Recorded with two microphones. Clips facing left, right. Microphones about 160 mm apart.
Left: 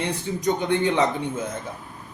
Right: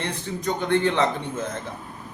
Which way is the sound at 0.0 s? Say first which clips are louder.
Left 3 dB; 15° left (ahead or behind).